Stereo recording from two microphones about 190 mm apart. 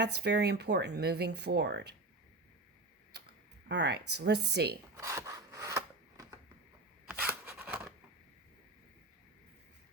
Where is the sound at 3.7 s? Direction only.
65° right (ahead or behind).